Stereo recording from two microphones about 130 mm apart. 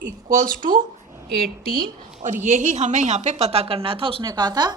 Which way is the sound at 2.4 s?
65° right (ahead or behind).